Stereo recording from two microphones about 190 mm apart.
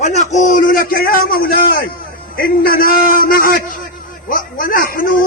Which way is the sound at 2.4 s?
50° left (ahead or behind).